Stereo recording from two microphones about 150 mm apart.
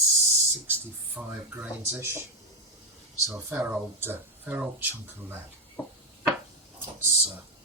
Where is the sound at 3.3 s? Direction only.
15° right (ahead or behind).